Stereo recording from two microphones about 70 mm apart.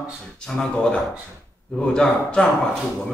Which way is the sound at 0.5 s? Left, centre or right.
Centre.